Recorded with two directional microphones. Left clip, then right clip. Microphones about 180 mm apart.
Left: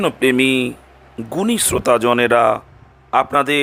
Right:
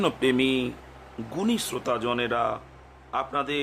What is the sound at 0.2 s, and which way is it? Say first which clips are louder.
Speech: left 9 dB; 35° left (ahead or behind).